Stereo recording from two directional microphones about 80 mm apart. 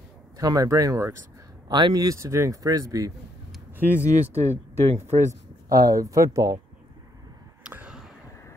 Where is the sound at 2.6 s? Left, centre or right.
Right.